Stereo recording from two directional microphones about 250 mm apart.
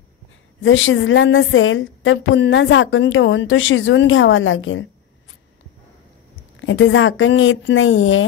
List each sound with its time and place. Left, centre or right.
0.6 s a woman's voice: left
6.6 s a woman's voice: left